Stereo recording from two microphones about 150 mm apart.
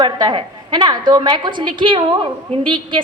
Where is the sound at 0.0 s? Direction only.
30° right (ahead or behind).